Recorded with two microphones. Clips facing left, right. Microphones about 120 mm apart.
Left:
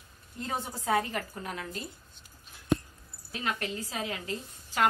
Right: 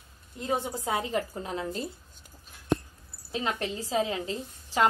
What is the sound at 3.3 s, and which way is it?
A woman's voice, 25° right (ahead or behind).